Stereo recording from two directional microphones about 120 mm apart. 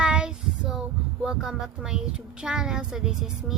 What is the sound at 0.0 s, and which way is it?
Child singing, 5° right (ahead or behind).